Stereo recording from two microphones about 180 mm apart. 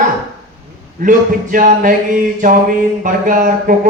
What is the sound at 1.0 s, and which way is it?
Speech, 50° right (ahead or behind).